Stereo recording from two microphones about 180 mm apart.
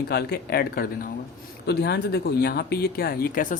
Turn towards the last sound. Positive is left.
turn(degrees=50)  # may be behind; listen again after turning